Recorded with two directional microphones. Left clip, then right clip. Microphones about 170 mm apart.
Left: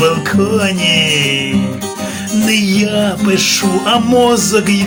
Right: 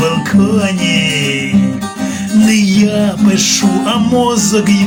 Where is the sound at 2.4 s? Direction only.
20° left (ahead or behind).